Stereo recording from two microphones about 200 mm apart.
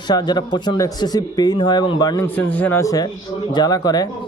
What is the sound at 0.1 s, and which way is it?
A man's voice, 20° left (ahead or behind).